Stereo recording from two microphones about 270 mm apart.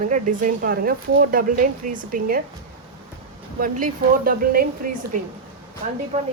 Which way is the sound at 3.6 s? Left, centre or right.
Right.